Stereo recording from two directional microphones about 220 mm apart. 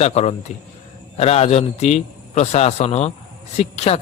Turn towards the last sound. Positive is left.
turn(degrees=30)  # may be behind; listen again after turning